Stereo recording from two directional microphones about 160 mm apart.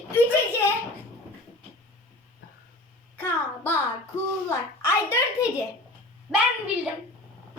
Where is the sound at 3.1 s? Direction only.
10° left (ahead or behind).